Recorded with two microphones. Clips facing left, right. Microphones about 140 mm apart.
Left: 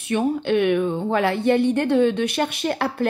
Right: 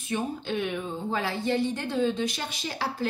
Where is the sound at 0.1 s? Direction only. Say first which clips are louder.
Left 10 dB; 70° left (ahead or behind).